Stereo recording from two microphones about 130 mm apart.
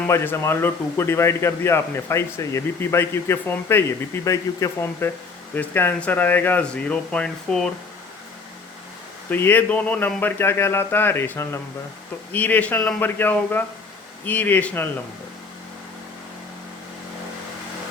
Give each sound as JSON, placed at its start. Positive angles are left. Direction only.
{"t": 0.1, "sound": "a man's voice", "side_deg": 20}
{"t": 9.3, "sound": "speech", "side_deg": 15}